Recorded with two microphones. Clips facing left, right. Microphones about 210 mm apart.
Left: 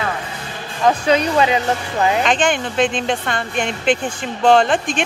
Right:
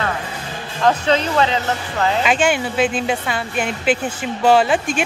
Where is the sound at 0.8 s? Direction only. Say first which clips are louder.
Left 1 dB; 10° left (ahead or behind).